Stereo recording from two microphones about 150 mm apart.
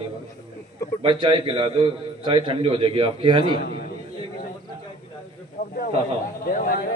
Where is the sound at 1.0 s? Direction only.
35° right (ahead or behind).